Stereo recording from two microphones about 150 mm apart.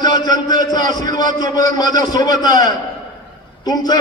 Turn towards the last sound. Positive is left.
turn(degrees=25)  # may be behind; listen again after turning